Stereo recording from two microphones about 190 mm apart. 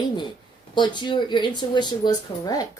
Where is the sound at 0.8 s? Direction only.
25° left (ahead or behind).